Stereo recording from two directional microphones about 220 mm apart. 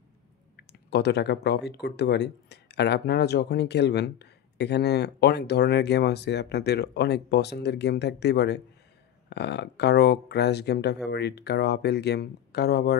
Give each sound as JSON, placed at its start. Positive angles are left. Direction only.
{"t": 0.6, "sound": "speech", "side_deg": 50}